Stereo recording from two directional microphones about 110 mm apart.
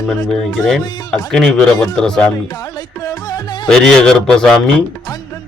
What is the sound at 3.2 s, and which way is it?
Music, 35° left (ahead or behind).